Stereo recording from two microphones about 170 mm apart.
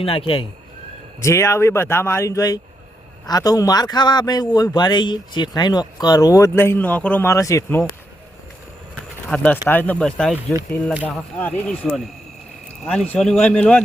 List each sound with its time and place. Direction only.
0.0 s speech: 35° left (ahead or behind)
1.2 s a man's voice: 15° left (ahead or behind)
9.3 s speech: 10° left (ahead or behind)
13.1 s speech: 5° left (ahead or behind)